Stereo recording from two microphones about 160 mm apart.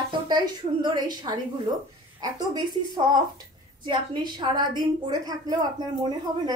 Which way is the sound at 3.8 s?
30° right (ahead or behind).